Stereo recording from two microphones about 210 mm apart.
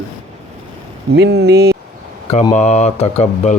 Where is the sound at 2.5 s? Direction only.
35° left (ahead or behind).